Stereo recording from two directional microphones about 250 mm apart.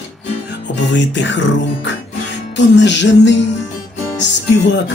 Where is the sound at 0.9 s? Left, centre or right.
Left.